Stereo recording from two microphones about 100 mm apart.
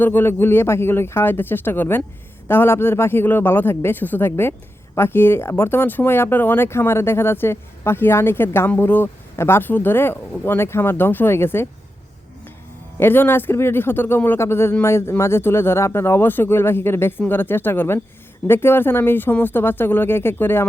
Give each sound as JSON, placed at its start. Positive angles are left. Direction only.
{"t": 0.0, "sound": "speech", "side_deg": 20}
{"t": 13.0, "sound": "speech", "side_deg": 20}